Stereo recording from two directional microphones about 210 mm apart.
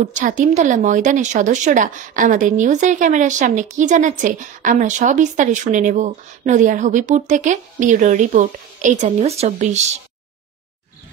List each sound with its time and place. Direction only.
0.1 s speech: 35° right (ahead or behind)